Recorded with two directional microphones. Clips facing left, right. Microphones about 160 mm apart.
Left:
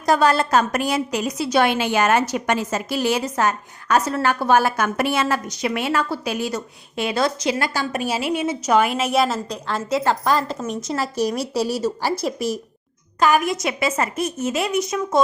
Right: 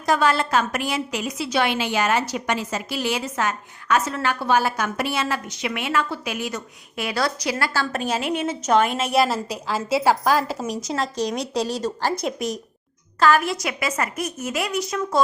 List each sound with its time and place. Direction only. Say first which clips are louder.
0.0 s a woman's voice: left 3 dB; 40° left (ahead or behind); by 12.5 s centre (ahead or behind)
13.1 s a woman's voice: left 1 dB; 15° left (ahead or behind)